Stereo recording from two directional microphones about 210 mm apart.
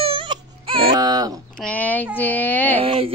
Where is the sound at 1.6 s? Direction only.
5° left (ahead or behind).